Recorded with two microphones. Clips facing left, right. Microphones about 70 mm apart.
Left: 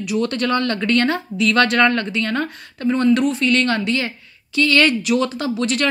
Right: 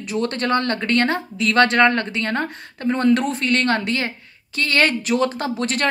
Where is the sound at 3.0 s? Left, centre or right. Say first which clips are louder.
Left 1 dB; right.